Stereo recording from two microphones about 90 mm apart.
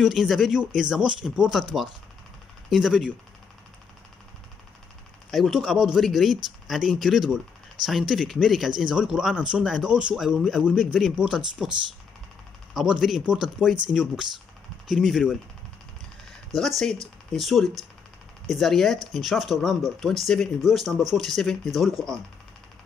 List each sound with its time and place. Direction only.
0.0 s speech: 5° right (ahead or behind)
5.3 s speech: centre (ahead or behind)
7.8 s speech: 55° right (ahead or behind)
8.1 s speech: 5° right (ahead or behind)
12.7 s speech: 5° right (ahead or behind)
14.9 s speech: 5° right (ahead or behind)
16.5 s speech: centre (ahead or behind)